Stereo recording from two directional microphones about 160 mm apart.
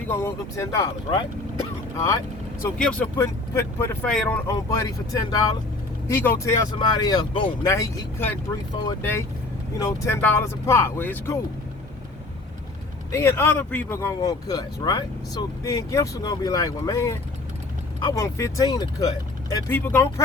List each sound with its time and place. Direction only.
0.1 s speech: 15° left (ahead or behind)
2.6 s speech: 10° left (ahead or behind)
4.0 s speech: 5° left (ahead or behind)
4.4 s speech: 20° left (ahead or behind)
13.1 s speech: 15° left (ahead or behind)